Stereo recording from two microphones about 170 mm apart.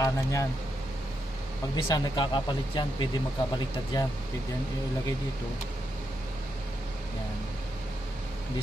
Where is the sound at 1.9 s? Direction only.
25° left (ahead or behind).